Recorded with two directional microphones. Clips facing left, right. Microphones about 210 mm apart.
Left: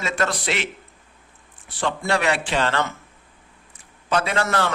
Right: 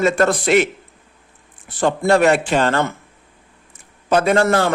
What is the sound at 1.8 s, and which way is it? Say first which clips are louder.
A man's voice: right 9 dB; 45° right (ahead or behind).